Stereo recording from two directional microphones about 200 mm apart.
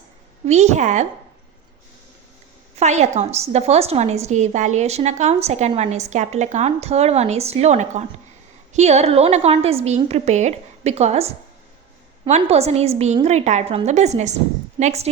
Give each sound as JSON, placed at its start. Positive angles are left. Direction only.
{"t": 0.4, "sound": "a woman's voice", "side_deg": -35}
{"t": 2.7, "sound": "a woman's voice", "side_deg": -35}